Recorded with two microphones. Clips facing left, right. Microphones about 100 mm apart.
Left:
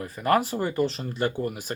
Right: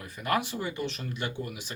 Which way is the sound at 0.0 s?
40° left (ahead or behind).